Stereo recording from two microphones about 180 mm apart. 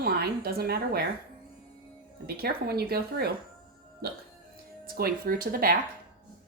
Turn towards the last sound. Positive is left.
turn(degrees=-55)  # may be behind; listen again after turning